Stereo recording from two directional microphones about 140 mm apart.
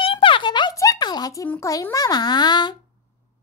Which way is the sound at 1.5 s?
20° left (ahead or behind).